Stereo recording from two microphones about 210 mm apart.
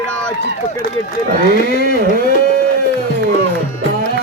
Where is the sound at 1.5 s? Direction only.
45° left (ahead or behind).